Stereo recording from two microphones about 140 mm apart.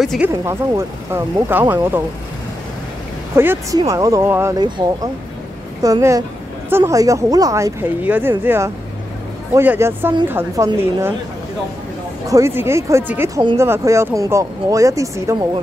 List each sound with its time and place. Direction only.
0.3 s speech: 20° right (ahead or behind)
3.3 s speech: 20° right (ahead or behind)
4.6 s speech: 30° right (ahead or behind); by 11.1 s 15° right (ahead or behind)
12.3 s speech: 20° right (ahead or behind)